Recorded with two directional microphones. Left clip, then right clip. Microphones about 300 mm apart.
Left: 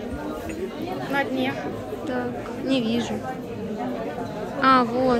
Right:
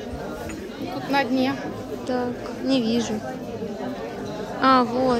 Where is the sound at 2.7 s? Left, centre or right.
Centre.